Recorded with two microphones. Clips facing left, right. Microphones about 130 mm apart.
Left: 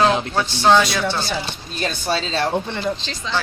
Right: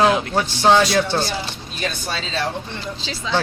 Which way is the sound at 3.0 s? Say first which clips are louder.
Right 2 dB; 5° right (ahead or behind).